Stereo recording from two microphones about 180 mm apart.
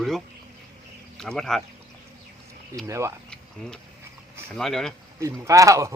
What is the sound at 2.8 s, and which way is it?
Speech, 15° right (ahead or behind).